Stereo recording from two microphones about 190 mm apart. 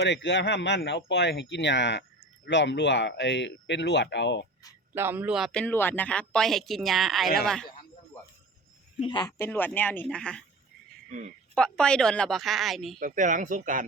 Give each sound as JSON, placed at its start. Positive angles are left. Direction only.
{"t": 0.0, "sound": "speech", "side_deg": 70}
{"t": 4.9, "sound": "speech", "side_deg": -10}
{"t": 9.0, "sound": "speech", "side_deg": 25}
{"t": 9.4, "sound": "speech", "side_deg": 10}
{"t": 11.5, "sound": "speech", "side_deg": 5}
{"t": 13.0, "sound": "speech", "side_deg": -40}